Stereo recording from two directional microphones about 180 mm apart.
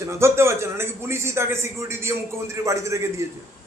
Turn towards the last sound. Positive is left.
turn(degrees=-15)  # may be behind; listen again after turning